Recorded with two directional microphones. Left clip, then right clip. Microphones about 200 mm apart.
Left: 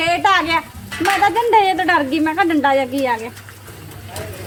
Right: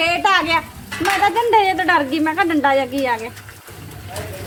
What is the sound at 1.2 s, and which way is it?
Speech, 25° left (ahead or behind).